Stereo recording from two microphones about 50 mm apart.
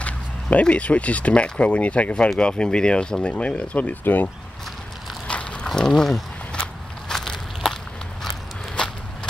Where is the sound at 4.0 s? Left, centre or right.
Left.